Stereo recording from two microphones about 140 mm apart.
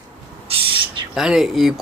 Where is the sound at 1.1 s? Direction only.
5° right (ahead or behind).